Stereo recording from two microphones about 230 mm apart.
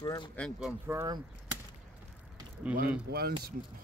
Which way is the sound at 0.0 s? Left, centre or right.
Centre.